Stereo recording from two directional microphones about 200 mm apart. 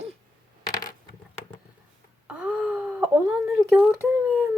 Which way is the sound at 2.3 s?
5° right (ahead or behind).